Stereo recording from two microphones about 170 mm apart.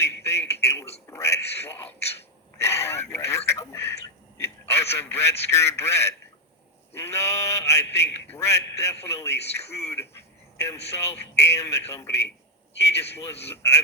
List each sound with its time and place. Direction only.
0.0 s radio: 15° left (ahead or behind)
0.6 s a sound: 20° left (ahead or behind)
4.4 s a man's voice: 15° left (ahead or behind)